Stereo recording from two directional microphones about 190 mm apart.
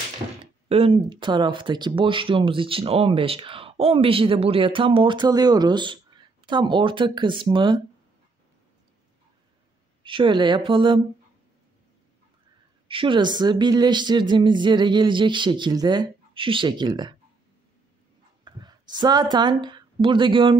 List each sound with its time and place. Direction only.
0.7 s speech: 30° right (ahead or behind)
10.0 s speech: 25° right (ahead or behind)
12.8 s speech: 25° right (ahead or behind)
18.4 s a sound: 20° right (ahead or behind)
19.3 s a woman's voice: 25° right (ahead or behind)